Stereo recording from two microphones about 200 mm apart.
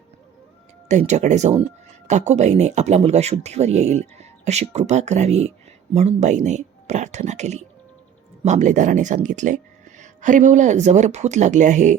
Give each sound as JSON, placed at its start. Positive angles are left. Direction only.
{"t": 0.9, "sound": "speech", "side_deg": -35}